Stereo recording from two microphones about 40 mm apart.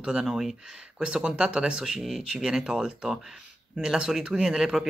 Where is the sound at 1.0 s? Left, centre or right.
Right.